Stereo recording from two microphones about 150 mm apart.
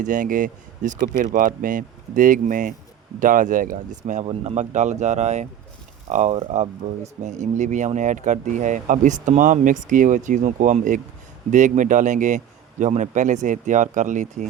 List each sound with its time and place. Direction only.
0.0 s speech: 60° right (ahead or behind)